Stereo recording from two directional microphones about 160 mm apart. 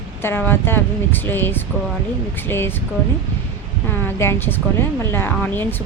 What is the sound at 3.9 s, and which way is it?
Speech, 15° left (ahead or behind).